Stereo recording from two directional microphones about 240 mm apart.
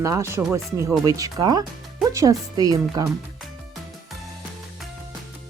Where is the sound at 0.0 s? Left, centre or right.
Centre.